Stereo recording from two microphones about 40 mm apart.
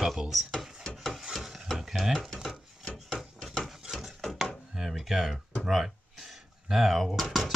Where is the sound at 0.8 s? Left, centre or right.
Centre.